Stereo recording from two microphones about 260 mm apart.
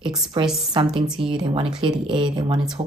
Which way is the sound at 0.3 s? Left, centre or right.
Centre.